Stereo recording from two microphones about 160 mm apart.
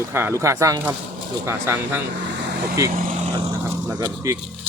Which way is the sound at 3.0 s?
55° right (ahead or behind).